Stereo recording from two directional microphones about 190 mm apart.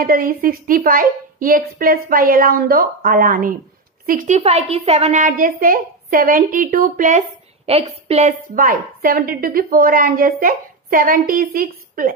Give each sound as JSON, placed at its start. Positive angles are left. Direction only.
{"t": 0.0, "sound": "a woman's voice", "side_deg": -50}